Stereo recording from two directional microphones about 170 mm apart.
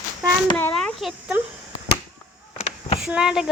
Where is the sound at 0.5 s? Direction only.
5° left (ahead or behind).